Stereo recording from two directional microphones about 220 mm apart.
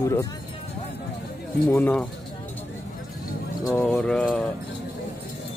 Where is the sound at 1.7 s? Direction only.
5° left (ahead or behind).